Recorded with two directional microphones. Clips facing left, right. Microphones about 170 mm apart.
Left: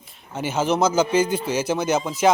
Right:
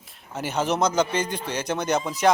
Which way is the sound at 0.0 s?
Centre (ahead or behind).